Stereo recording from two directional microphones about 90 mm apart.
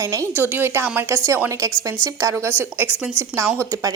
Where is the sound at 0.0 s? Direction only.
40° right (ahead or behind).